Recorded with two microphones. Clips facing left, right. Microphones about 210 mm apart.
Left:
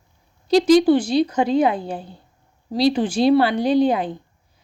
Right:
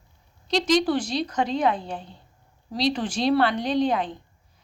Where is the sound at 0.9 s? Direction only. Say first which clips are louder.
Left 7 dB; 5° left (ahead or behind).